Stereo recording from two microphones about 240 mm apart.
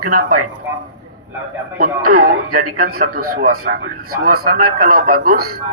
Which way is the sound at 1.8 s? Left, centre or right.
Right.